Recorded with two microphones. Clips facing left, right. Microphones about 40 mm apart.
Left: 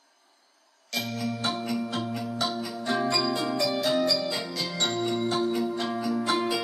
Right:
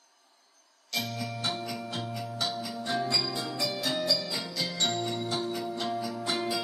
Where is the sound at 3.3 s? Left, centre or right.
Centre.